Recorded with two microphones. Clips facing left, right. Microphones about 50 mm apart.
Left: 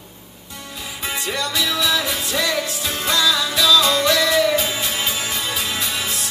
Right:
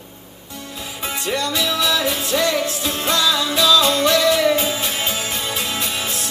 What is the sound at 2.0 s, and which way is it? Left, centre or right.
Music, right.